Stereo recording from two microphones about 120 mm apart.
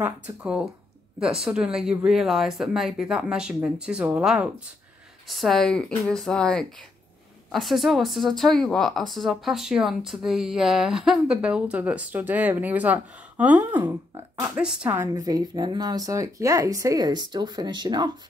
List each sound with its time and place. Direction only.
0.0 s speech: 10° right (ahead or behind)
15.0 s speech: 30° right (ahead or behind)